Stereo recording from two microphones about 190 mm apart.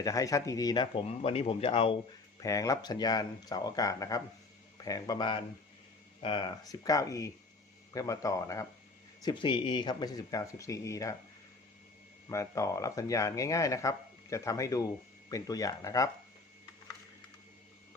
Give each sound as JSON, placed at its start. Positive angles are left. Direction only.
{"t": 0.0, "sound": "speech", "side_deg": 15}
{"t": 2.4, "sound": "speech", "side_deg": 15}
{"t": 12.3, "sound": "speech", "side_deg": 15}